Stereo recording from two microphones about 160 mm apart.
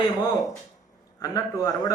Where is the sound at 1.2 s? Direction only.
20° left (ahead or behind).